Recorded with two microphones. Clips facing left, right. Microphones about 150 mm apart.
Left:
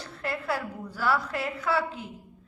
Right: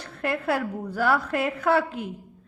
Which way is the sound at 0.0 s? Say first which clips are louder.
Right 6 dB; 55° right (ahead or behind).